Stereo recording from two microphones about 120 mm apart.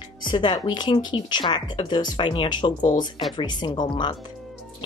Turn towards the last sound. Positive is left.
turn(degrees=40)  # may be behind; listen again after turning